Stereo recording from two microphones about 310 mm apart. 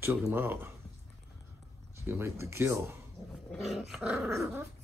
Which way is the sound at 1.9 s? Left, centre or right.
Centre.